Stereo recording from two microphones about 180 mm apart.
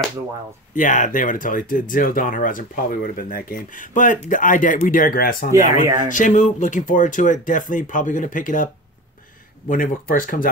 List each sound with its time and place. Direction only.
0.7 s speech: 45° left (ahead or behind)
9.7 s speech: 50° left (ahead or behind)